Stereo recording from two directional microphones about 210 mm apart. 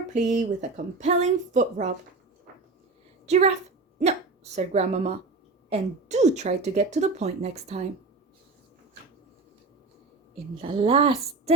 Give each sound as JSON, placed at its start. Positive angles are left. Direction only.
{"t": 0.1, "sound": "a woman's voice", "side_deg": -35}
{"t": 3.2, "sound": "a woman's voice", "side_deg": -30}
{"t": 10.6, "sound": "a woman's voice", "side_deg": -25}